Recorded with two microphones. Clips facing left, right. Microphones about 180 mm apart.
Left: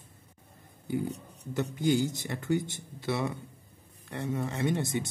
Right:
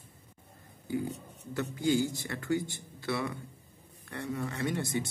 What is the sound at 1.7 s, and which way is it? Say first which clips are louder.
Speech: left 1 dB; 20° left (ahead or behind).